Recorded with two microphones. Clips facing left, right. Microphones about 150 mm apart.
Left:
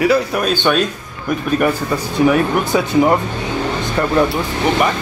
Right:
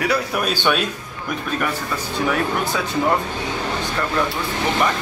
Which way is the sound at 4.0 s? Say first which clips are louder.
Left 9 dB; 35° left (ahead or behind).